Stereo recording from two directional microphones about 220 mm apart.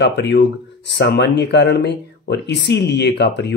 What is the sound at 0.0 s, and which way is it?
Speech, 50° left (ahead or behind).